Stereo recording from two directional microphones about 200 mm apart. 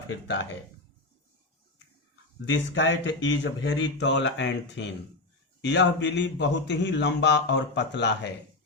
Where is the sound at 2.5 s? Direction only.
65° left (ahead or behind).